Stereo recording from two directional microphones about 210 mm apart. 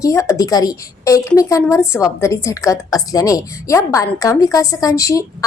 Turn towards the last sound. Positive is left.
turn(degrees=15)  # may be behind; listen again after turning